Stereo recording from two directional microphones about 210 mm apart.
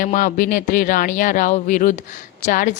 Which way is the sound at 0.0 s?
40° left (ahead or behind).